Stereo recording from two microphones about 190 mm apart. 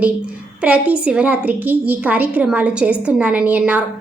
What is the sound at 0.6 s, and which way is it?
A woman's voice, 5° right (ahead or behind).